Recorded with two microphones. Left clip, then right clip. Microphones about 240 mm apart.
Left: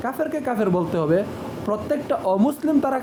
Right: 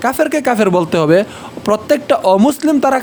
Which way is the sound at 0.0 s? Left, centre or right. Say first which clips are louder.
Right 11 dB; right.